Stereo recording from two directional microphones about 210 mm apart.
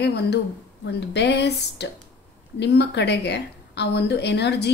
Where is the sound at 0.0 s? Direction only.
50° left (ahead or behind).